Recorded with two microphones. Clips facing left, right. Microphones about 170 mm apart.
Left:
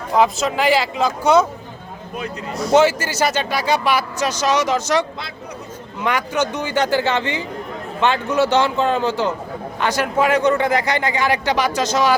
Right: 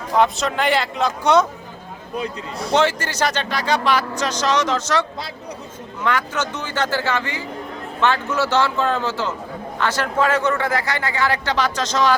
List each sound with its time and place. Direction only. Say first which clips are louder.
0.2 s speech: left 1 dB; 5° left (ahead or behind)
2.1 s speech: even; 30° right (ahead or behind)
2.7 s a man's voice: left 4 dB; 5° left (ahead or behind)